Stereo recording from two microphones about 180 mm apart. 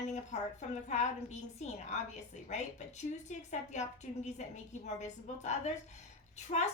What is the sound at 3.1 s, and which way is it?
A woman's voice, 40° left (ahead or behind).